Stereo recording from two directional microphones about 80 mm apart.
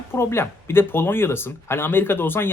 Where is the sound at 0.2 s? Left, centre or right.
Left.